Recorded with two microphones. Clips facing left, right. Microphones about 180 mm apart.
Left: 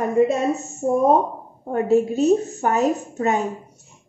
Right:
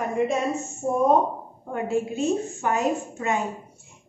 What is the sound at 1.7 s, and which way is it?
A woman's voice, 40° left (ahead or behind).